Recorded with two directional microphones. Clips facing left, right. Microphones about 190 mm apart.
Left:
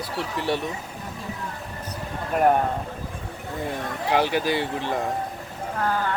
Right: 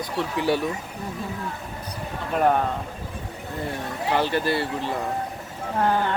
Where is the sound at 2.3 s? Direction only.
10° left (ahead or behind).